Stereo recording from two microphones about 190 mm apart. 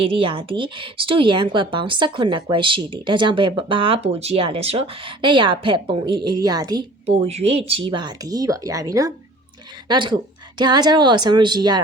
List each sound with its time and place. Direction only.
0.0 s speech: 30° right (ahead or behind)
7.0 s speech: 35° right (ahead or behind)